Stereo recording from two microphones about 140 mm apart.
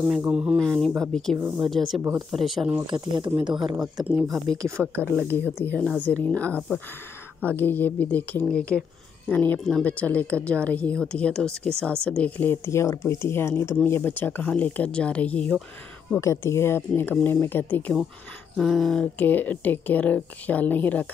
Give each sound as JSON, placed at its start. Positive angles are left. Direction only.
{"t": 0.2, "sound": "speech", "side_deg": -5}
{"t": 0.6, "sound": "speech", "side_deg": 5}
{"t": 2.0, "sound": "speech", "side_deg": -25}
{"t": 2.3, "sound": "speech", "side_deg": 0}
{"t": 3.4, "sound": "speech", "side_deg": -35}
{"t": 4.0, "sound": "speech", "side_deg": -15}
{"t": 4.3, "sound": "speech", "side_deg": -25}
{"t": 5.7, "sound": "speech", "side_deg": 5}